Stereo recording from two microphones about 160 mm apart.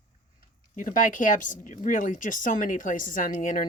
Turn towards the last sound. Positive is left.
turn(degrees=55)  # may be behind; listen again after turning